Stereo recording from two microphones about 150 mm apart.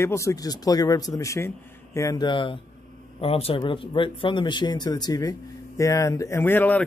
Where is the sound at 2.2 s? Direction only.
35° left (ahead or behind).